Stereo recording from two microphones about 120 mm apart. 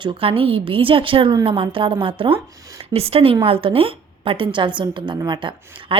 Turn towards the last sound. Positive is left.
turn(degrees=-40)  # may be behind; listen again after turning